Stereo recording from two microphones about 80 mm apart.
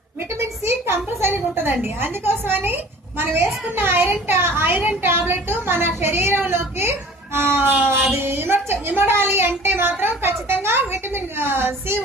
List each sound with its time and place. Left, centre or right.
0.3 s a woman's voice: right